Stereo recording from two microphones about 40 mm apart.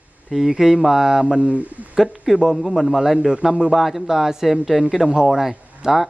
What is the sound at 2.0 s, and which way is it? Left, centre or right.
A man's voice, centre.